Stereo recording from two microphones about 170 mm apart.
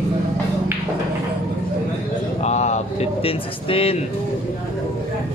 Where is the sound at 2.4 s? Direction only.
40° left (ahead or behind).